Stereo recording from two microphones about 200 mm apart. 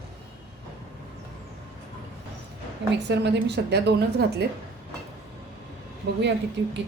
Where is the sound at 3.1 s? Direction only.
60° right (ahead or behind).